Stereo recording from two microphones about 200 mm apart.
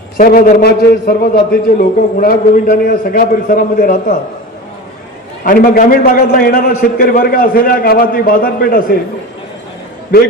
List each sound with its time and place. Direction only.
0.2 s a man's voice: 45° left (ahead or behind)
5.4 s a man's voice: 45° left (ahead or behind)